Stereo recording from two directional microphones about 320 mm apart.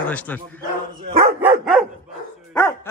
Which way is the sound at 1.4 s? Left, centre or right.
Centre.